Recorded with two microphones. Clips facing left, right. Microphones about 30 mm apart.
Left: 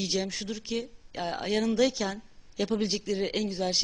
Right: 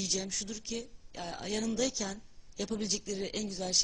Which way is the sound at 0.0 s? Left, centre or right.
Left.